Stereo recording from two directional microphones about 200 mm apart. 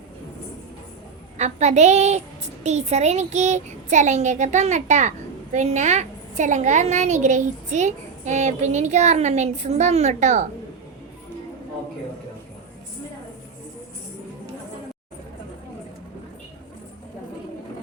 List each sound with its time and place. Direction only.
1.4 s a woman's voice: 35° right (ahead or behind)